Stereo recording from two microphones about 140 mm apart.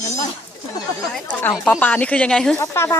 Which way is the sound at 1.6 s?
10° left (ahead or behind).